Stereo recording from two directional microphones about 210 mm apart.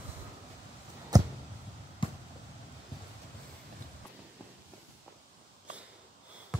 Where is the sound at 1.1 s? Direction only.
20° right (ahead or behind).